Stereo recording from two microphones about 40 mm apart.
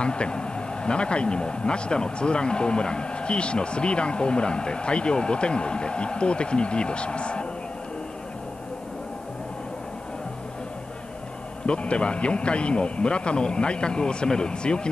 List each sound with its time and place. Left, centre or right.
0.0 s speech: left
11.6 s speech: left